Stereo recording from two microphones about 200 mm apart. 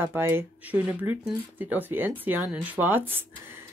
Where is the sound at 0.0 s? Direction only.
10° right (ahead or behind).